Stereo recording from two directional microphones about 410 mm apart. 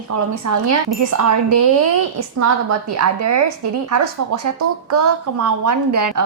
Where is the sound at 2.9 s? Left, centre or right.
Right.